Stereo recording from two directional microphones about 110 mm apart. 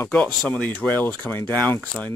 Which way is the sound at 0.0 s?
10° left (ahead or behind).